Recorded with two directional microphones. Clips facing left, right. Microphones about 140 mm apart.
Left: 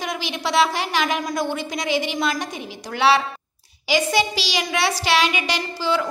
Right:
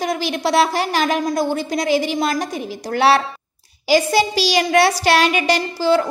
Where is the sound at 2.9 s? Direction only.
45° right (ahead or behind).